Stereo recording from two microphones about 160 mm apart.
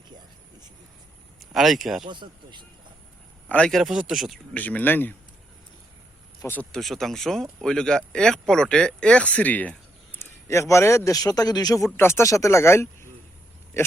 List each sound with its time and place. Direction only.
1.5 s speech: centre (ahead or behind)
2.0 s speech: 30° right (ahead or behind)
3.5 s speech: 5° left (ahead or behind)
4.5 s speech: 10° left (ahead or behind)
6.4 s speech: 10° left (ahead or behind)